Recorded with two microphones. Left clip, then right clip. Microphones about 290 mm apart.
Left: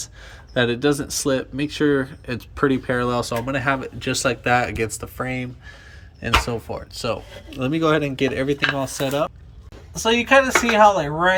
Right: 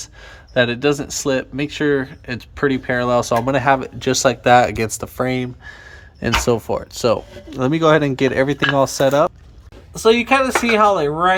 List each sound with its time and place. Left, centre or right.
0.5 s speech: centre